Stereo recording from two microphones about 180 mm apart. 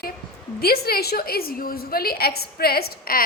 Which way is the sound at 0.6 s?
60° left (ahead or behind).